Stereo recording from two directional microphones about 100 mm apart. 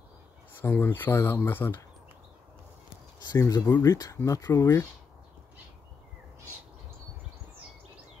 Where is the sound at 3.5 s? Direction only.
35° left (ahead or behind).